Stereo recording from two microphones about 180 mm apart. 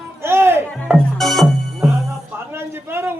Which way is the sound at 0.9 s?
Centre (ahead or behind).